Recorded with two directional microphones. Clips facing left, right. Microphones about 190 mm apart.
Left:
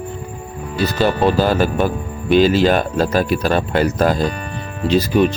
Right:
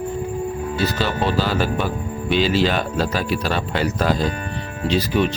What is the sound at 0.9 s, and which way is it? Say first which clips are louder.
Speech: left 10 dB; 50° left (ahead or behind).